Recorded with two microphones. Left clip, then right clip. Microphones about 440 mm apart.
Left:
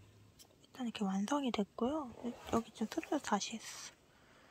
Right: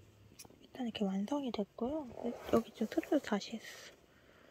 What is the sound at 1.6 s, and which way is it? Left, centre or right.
Speech, centre.